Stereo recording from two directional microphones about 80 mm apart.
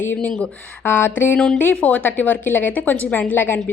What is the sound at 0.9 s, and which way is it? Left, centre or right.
A woman's voice, left.